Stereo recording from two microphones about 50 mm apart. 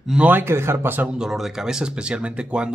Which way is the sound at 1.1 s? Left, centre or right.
Centre.